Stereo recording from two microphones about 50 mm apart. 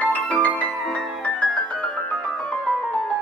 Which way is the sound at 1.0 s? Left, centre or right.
Centre.